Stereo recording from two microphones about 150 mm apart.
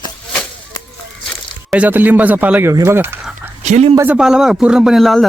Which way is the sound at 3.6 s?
45° right (ahead or behind).